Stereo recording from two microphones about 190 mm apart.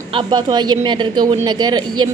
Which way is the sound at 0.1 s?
25° right (ahead or behind).